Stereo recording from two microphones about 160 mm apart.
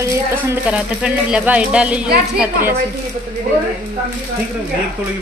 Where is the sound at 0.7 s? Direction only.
5° right (ahead or behind).